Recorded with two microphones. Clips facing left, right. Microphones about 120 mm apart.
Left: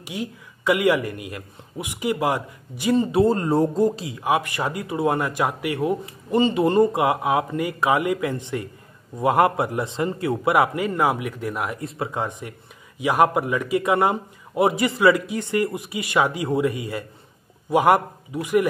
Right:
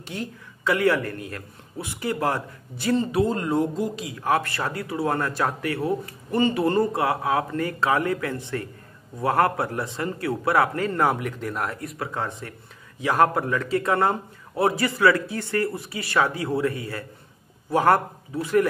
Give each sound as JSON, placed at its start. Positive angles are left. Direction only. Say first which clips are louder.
{"t": 0.0, "sound": "speech", "louder": "left 2 dB", "side_deg": 15}
{"t": 3.1, "sound": "speech", "louder": "left 4 dB", "side_deg": 30}
{"t": 4.2, "sound": "speech", "louder": "left 1 dB", "side_deg": 15}
{"t": 11.8, "sound": "speech", "louder": "left 3 dB", "side_deg": 25}